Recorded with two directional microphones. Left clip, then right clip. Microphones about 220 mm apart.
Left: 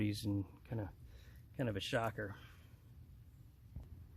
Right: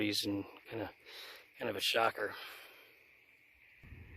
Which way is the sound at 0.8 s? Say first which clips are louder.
Right 9 dB; 35° right (ahead or behind).